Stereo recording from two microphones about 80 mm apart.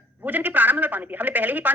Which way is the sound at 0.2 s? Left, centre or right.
Right.